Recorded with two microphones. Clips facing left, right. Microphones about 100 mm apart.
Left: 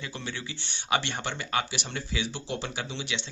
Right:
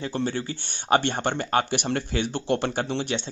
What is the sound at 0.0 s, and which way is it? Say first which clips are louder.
Speech: right 10 dB; 45° right (ahead or behind).